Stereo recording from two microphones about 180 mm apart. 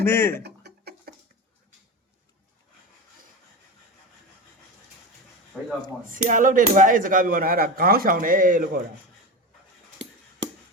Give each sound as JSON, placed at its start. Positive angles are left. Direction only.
{"t": 0.0, "sound": "speech", "side_deg": 15}
{"t": 0.4, "sound": "chicken", "side_deg": -65}
{"t": 5.5, "sound": "speech", "side_deg": -10}
{"t": 6.1, "sound": "speech", "side_deg": -45}